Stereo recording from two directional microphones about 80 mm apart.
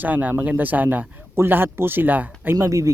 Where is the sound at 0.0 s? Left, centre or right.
Right.